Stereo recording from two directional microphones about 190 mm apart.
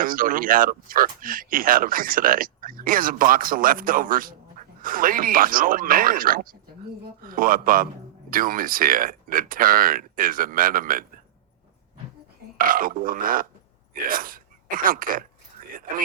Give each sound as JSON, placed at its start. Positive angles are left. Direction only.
{"t": 0.0, "sound": "speech", "side_deg": -45}
{"t": 12.5, "sound": "speech", "side_deg": -45}
{"t": 15.6, "sound": "a sound", "side_deg": -45}